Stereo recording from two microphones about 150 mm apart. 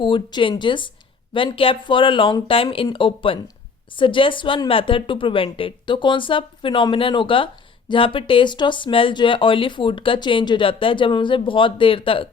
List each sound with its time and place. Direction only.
0.0 s a woman's voice: 30° left (ahead or behind)